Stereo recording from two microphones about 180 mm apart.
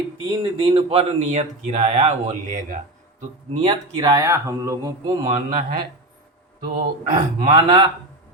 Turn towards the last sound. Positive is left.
turn(degrees=-25)  # may be behind; listen again after turning